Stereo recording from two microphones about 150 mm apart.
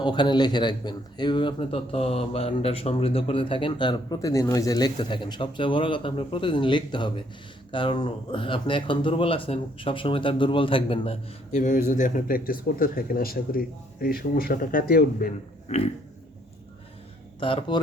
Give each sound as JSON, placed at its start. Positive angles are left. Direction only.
{"t": 0.0, "sound": "a man's voice", "side_deg": 30}
{"t": 11.9, "sound": "speech", "side_deg": 60}
{"t": 15.7, "sound": "pig", "side_deg": 50}
{"t": 17.4, "sound": "a man's voice", "side_deg": 35}